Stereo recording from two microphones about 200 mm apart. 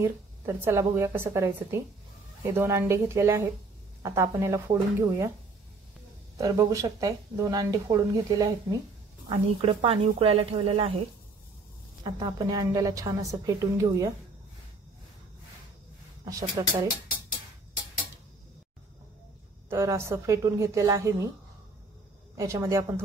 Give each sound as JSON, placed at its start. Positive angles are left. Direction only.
{"t": 0.0, "sound": "speech", "side_deg": -15}
{"t": 6.3, "sound": "speech", "side_deg": -15}
{"t": 9.3, "sound": "speech", "side_deg": -30}
{"t": 12.0, "sound": "speech", "side_deg": -20}
{"t": 16.3, "sound": "speech", "side_deg": -15}
{"t": 19.7, "sound": "speech", "side_deg": -15}
{"t": 22.4, "sound": "speech", "side_deg": -15}